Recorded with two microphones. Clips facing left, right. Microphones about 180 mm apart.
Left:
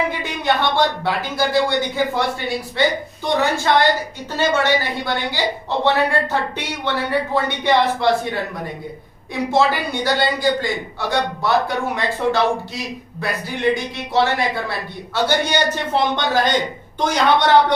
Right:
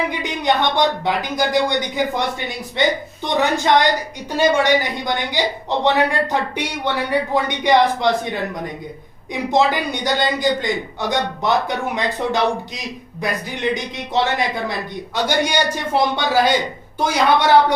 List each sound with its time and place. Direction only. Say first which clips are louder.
0.1 s a man's voice: right 1 dB; 15° right (ahead or behind)